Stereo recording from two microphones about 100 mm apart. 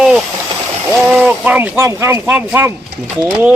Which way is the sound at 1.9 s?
30° right (ahead or behind).